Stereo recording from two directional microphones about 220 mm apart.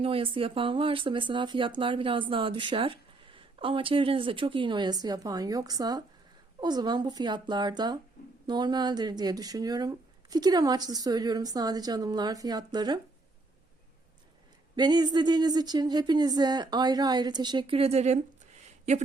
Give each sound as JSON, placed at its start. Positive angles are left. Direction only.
{"t": 0.0, "sound": "speech", "side_deg": -25}
{"t": 14.8, "sound": "speech", "side_deg": -20}